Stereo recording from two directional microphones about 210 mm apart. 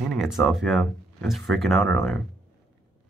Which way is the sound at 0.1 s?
Centre (ahead or behind).